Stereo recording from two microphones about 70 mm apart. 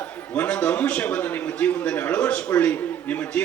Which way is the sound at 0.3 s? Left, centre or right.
Centre.